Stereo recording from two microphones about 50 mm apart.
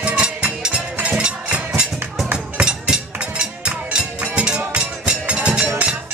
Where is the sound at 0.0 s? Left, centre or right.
Right.